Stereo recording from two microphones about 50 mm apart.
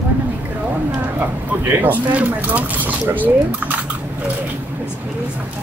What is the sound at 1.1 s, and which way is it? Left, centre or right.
Speech, right.